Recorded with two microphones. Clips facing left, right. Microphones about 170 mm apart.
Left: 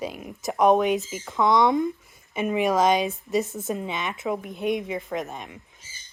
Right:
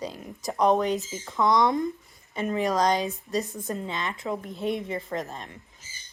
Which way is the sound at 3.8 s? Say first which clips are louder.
Left 3 dB; 15° left (ahead or behind).